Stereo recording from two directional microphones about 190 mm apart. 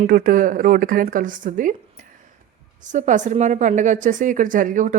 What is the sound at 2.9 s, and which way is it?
A woman's voice, 40° right (ahead or behind).